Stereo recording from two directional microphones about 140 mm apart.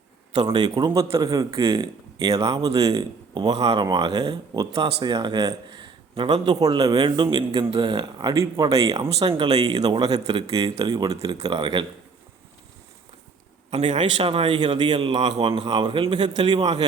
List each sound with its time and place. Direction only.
0.3 s speech: 30° right (ahead or behind)
13.7 s a man's voice: 50° right (ahead or behind)
14.0 s speech: 40° right (ahead or behind)